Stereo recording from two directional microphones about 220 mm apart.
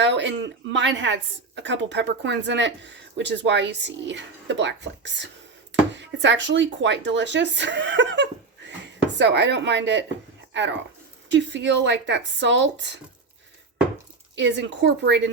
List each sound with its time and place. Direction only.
0.0 s a woman's voice: 55° right (ahead or behind)
14.3 s a woman's voice: 55° right (ahead or behind)